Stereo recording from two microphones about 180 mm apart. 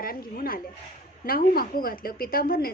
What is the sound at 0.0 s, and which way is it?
A woman's voice, 55° left (ahead or behind).